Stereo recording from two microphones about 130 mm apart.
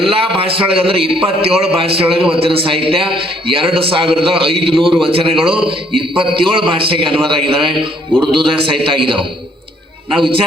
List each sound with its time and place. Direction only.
0.0 s a man's voice: 45° right (ahead or behind)